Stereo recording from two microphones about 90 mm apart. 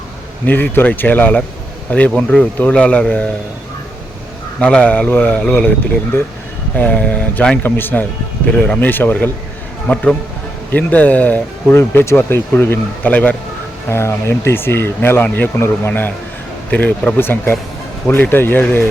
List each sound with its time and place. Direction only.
0.4 s speech: 20° left (ahead or behind)
4.6 s speech: 15° left (ahead or behind)
5.4 s speech: 5° left (ahead or behind)
6.7 s speech: 15° left (ahead or behind)
11.8 s speech: 30° left (ahead or behind)
13.9 s speech: 30° left (ahead or behind)